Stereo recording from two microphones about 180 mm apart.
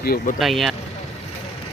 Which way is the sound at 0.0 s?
55° left (ahead or behind).